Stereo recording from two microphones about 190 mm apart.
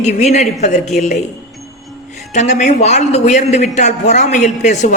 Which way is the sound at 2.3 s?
40° left (ahead or behind).